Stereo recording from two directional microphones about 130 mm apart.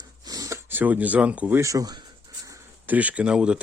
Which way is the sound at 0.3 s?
25° right (ahead or behind).